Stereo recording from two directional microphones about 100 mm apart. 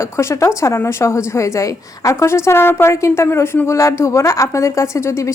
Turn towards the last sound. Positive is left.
turn(degrees=30)  # may be behind; listen again after turning